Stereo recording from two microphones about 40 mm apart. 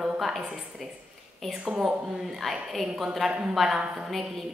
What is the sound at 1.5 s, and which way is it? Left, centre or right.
Speech, centre.